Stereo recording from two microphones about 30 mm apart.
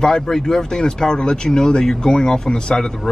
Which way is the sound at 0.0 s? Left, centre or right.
Centre.